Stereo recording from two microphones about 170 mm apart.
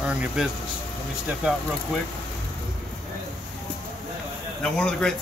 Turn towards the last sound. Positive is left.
turn(degrees=5)  # may be behind; listen again after turning